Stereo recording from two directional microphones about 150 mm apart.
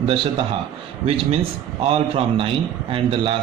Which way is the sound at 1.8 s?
40° right (ahead or behind).